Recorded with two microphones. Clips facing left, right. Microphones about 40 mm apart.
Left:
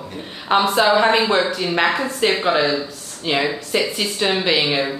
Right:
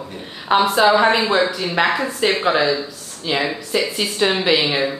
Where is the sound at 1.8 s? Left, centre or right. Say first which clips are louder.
Right 1 dB; centre.